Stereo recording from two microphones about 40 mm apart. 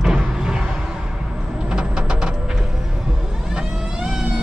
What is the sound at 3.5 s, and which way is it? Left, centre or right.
Vehicle, centre.